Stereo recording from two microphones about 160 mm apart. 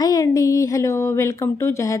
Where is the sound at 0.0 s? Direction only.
20° left (ahead or behind).